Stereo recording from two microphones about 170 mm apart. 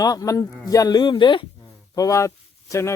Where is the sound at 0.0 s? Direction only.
20° left (ahead or behind).